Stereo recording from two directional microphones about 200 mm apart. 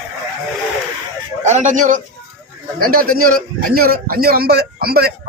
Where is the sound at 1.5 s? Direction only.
35° right (ahead or behind).